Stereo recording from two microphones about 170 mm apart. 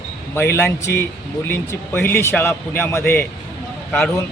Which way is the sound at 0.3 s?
15° left (ahead or behind).